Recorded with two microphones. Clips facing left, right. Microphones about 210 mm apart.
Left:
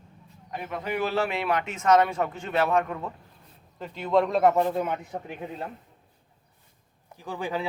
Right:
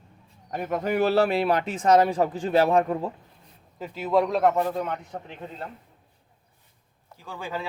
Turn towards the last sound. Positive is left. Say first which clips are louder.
# left 3 dB
turn(degrees=15)  # may be behind; listen again after turning